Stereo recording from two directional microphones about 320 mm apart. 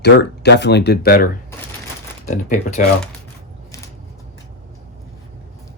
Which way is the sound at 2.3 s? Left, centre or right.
Left.